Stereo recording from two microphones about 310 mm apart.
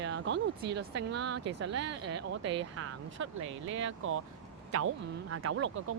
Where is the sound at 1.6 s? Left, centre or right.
Right.